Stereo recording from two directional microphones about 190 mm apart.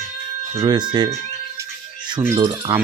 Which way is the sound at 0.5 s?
25° right (ahead or behind).